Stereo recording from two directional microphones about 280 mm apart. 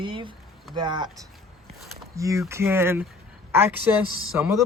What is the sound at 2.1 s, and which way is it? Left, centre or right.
A man's voice, centre.